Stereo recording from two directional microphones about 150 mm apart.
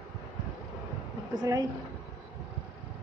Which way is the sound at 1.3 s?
25° right (ahead or behind).